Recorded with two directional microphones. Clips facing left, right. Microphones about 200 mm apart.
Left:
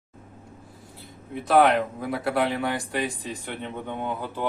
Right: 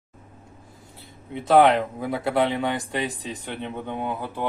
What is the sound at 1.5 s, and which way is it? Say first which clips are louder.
A man's voice: right 2 dB; 25° right (ahead or behind).